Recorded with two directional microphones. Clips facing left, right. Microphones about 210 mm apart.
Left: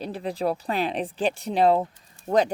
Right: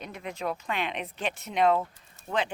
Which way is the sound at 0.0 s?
35° left (ahead or behind).